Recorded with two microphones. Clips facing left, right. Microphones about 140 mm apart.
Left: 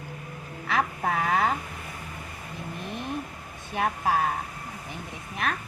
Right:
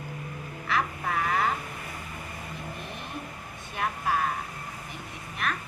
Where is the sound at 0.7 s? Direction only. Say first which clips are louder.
Left 3 dB; 60° left (ahead or behind).